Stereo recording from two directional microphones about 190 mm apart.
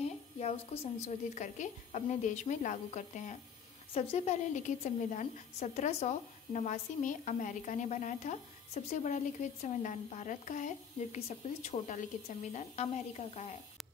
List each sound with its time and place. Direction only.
1.0 s a woman's voice: 40° left (ahead or behind)